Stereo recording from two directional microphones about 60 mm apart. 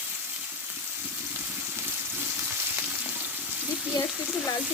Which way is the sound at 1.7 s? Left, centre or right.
Right.